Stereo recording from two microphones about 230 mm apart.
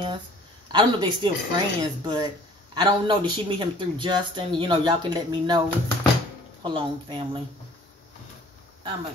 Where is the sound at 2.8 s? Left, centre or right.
Centre.